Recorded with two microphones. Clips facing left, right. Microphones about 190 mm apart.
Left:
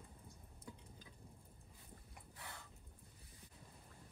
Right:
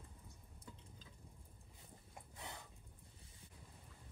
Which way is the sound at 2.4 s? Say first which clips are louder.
Right 3 dB; 20° right (ahead or behind).